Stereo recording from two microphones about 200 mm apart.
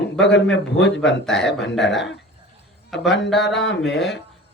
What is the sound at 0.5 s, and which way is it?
Speech, 60° left (ahead or behind).